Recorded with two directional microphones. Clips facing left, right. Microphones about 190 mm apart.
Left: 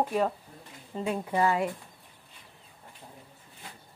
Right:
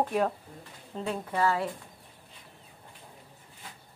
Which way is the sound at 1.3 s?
15° left (ahead or behind).